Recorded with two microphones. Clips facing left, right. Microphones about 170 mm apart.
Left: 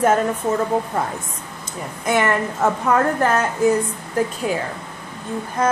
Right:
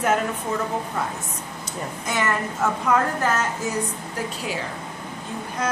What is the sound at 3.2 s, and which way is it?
Speech, 55° left (ahead or behind).